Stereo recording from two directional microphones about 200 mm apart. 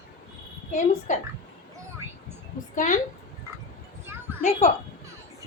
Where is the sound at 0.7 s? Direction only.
40° left (ahead or behind).